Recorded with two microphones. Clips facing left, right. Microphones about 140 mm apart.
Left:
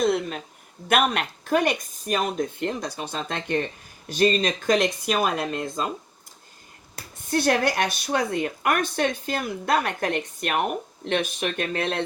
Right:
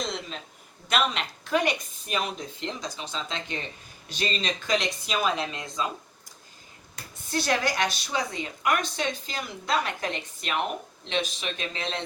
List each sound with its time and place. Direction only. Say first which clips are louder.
0.0 s a sound: left 10 dB; 55° left (ahead or behind)
0.9 s a woman's voice: left 5 dB; 55° left (ahead or behind)
7.3 s a woman's voice: left 5 dB; 55° left (ahead or behind)